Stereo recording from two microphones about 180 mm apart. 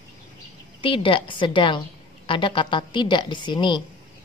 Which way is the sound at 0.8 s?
30° left (ahead or behind).